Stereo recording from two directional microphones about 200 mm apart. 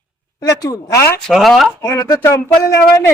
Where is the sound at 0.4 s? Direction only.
15° left (ahead or behind).